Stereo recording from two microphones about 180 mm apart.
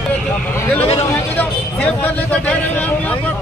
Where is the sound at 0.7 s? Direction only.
35° left (ahead or behind).